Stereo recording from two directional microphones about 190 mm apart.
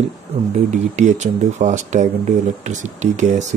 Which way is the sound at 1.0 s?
40° right (ahead or behind).